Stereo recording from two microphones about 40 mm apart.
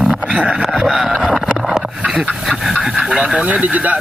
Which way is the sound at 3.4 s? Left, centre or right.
Right.